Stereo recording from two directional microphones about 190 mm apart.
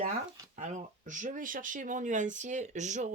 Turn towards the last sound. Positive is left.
turn(degrees=-40)  # may be behind; listen again after turning